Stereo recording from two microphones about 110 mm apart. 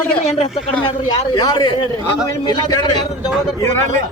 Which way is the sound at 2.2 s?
30° left (ahead or behind).